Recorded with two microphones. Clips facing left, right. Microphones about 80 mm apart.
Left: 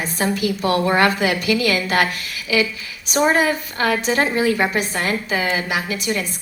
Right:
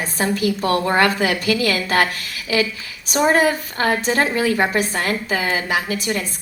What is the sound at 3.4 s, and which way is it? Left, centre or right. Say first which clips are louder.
A woman's voice: right 1 dB; right.